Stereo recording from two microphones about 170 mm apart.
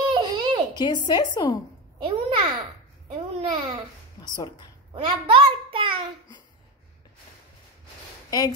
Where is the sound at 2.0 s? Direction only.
30° right (ahead or behind).